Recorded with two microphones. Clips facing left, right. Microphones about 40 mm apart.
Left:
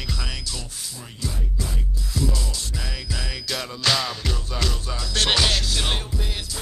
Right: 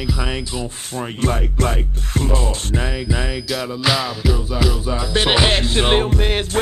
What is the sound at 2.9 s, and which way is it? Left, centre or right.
Music, right.